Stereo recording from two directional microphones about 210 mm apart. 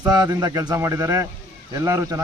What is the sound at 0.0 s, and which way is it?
Speech, 15° right (ahead or behind).